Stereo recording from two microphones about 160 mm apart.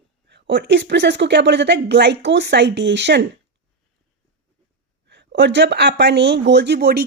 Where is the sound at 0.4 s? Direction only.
90° right.